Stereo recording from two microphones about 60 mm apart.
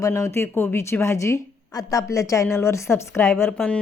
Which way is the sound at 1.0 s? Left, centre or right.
Left.